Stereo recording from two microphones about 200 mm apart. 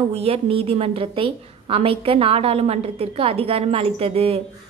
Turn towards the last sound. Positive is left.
turn(degrees=-30)  # may be behind; listen again after turning